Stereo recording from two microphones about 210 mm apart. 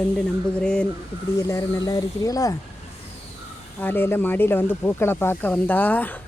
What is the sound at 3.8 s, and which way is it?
Speech, 10° left (ahead or behind).